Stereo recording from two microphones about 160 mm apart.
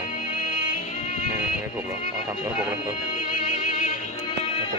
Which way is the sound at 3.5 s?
55° left (ahead or behind).